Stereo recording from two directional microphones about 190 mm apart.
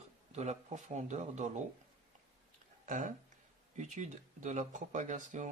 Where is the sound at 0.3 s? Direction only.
35° right (ahead or behind).